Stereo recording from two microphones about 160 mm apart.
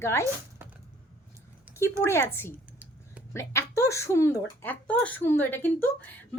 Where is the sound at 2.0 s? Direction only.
15° left (ahead or behind).